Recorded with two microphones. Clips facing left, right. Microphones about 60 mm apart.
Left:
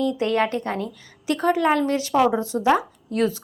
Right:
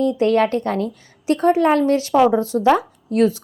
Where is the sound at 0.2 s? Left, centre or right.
Left.